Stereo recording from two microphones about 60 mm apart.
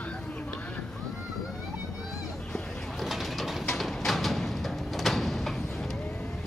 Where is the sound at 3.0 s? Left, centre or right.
Centre.